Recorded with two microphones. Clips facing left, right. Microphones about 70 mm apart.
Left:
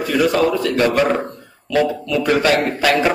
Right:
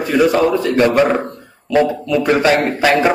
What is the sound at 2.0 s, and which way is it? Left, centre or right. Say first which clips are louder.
A man's voice: right 3 dB; right.